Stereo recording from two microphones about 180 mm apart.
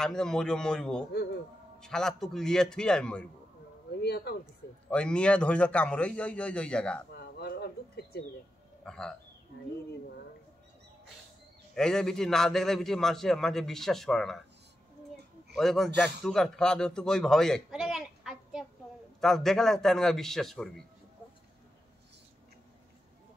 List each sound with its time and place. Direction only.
0.0 s a man's voice: 5° left (ahead or behind)
4.0 s speech: 65° left (ahead or behind)
4.8 s a man's voice: 5° left (ahead or behind)
7.2 s a sound: 65° left (ahead or behind)
8.8 s speech: 5° left (ahead or behind)
11.7 s a man's voice: 5° left (ahead or behind)
15.5 s a man's voice: centre (ahead or behind)